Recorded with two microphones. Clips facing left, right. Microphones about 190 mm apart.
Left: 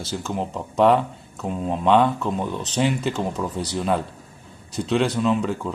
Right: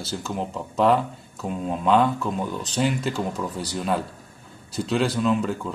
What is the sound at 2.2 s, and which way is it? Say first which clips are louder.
Speech: left 2 dB; 25° left (ahead or behind).